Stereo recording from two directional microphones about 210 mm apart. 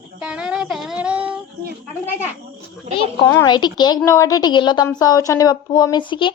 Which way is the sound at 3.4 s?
20° left (ahead or behind).